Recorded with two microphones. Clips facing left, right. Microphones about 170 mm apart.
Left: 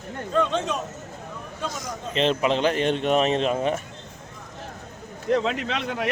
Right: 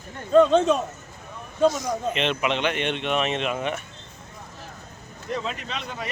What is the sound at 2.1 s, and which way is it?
A man's voice, 35° left (ahead or behind).